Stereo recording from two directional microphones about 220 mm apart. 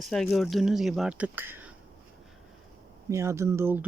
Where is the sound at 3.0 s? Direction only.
15° right (ahead or behind).